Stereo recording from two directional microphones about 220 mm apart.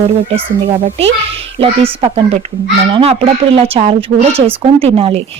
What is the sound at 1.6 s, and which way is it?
Speech, 30° right (ahead or behind).